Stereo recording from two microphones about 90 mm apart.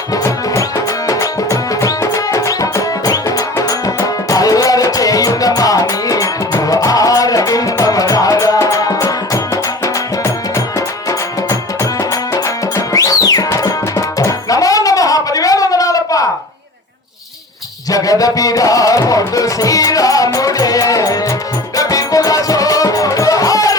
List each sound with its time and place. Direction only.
0.1 s music: 35° left (ahead or behind)
17.9 s music: 40° left (ahead or behind)